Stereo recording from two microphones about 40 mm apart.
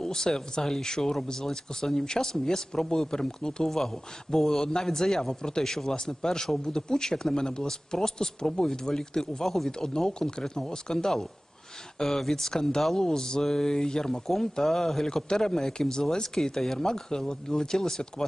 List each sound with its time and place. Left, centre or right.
0.0 s a man's voice: centre